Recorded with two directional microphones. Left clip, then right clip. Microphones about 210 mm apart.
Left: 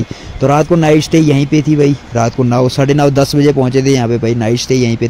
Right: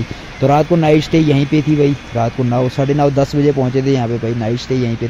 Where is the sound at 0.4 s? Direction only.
25° left (ahead or behind).